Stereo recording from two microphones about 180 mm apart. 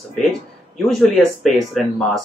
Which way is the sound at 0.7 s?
Centre (ahead or behind).